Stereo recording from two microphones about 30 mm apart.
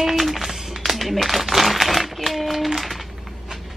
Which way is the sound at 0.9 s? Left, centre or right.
Centre.